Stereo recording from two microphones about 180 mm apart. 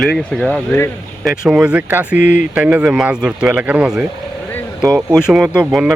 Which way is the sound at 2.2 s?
45° left (ahead or behind).